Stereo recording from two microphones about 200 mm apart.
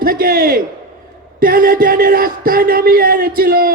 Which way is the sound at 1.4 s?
45° right (ahead or behind).